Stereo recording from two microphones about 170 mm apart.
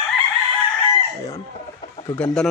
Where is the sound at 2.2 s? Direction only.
5° left (ahead or behind).